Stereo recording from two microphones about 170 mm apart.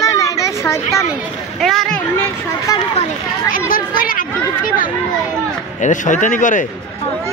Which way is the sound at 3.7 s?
55° left (ahead or behind).